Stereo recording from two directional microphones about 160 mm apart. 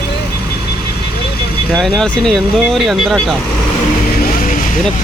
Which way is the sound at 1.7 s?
5° left (ahead or behind).